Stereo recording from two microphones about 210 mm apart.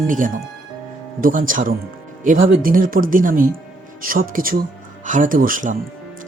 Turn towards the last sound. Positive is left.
turn(degrees=-40)  # may be behind; listen again after turning